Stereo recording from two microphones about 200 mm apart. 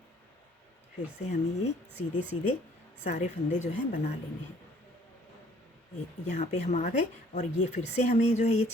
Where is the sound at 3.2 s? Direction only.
35° left (ahead or behind).